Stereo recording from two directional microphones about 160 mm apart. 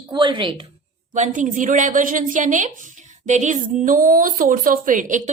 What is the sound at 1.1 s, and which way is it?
A woman's voice, 50° right (ahead or behind).